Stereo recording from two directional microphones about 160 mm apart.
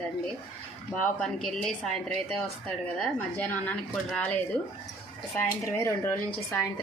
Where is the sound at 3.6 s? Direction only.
5° left (ahead or behind).